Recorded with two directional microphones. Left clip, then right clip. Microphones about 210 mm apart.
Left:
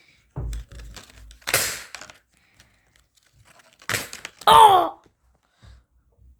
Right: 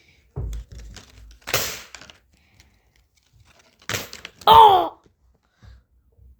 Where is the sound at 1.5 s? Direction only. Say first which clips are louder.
Left 1 dB; centre (ahead or behind).